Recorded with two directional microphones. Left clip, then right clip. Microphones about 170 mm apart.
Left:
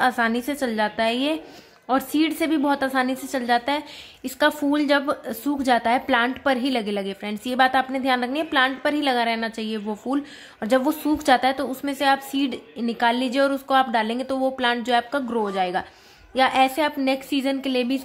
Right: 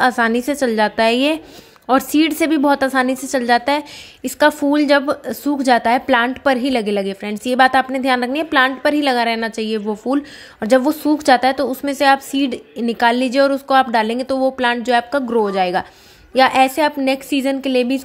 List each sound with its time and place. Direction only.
0.0 s a woman's voice: 30° right (ahead or behind)